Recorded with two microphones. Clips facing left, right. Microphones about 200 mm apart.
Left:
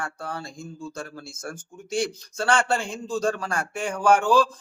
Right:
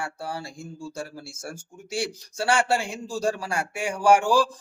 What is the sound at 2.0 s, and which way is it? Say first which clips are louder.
Speech: even; 15° right (ahead or behind).